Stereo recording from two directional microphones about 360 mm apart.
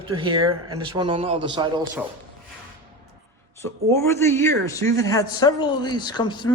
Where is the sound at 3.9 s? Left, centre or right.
Centre.